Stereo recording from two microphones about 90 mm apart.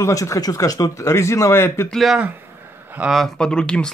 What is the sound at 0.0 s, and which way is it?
Speech, 35° left (ahead or behind).